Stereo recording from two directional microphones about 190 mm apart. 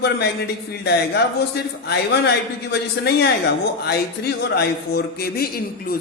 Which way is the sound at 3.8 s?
60° left (ahead or behind).